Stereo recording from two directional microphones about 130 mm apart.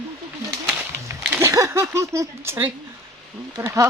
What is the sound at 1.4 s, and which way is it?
Speech, 25° right (ahead or behind).